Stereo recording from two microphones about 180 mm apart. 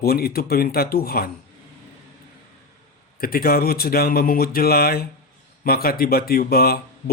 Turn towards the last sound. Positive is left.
turn(degrees=55)  # may be behind; listen again after turning